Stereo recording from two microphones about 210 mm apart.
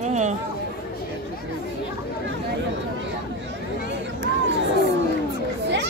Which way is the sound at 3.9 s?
55° right (ahead or behind).